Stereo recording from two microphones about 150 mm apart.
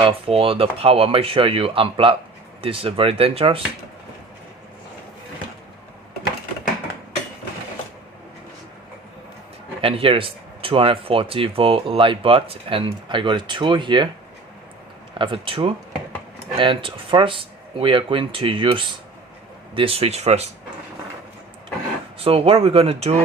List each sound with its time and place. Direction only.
0.0 s speech: 40° right (ahead or behind)
9.8 s speech: 35° right (ahead or behind)
15.2 s speech: 35° right (ahead or behind)
22.2 s speech: 40° right (ahead or behind)